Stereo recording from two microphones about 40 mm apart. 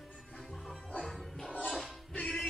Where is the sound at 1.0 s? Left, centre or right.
Centre.